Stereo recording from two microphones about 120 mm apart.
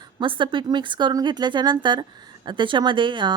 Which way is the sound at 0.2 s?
45° right (ahead or behind).